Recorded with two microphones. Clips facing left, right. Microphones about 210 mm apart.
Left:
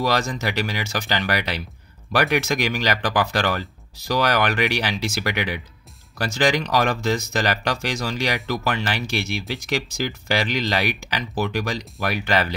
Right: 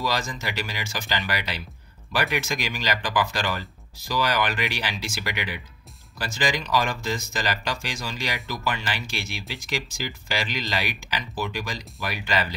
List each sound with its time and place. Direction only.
0.0 s speech: 65° left (ahead or behind)